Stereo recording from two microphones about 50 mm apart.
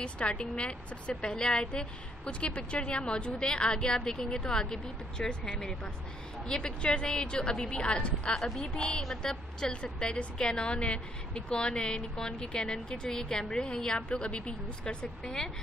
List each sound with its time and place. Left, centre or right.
0.0 s a woman's voice: left